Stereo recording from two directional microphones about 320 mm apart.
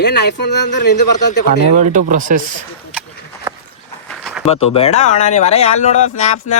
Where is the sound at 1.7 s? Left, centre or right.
Right.